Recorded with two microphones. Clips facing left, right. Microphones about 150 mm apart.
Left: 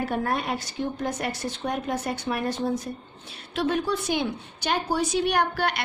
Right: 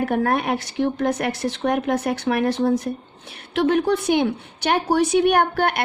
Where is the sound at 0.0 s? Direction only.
60° right (ahead or behind).